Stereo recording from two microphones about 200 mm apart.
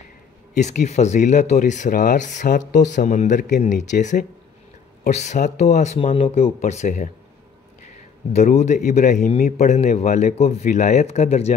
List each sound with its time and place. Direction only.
0.6 s a man's voice: 35° left (ahead or behind)
8.3 s a man's voice: 35° left (ahead or behind)